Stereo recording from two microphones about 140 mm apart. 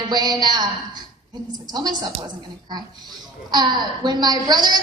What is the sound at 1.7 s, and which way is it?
Child singing, 30° right (ahead or behind).